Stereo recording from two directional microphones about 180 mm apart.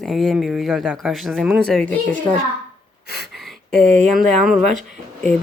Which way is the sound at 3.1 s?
Centre (ahead or behind).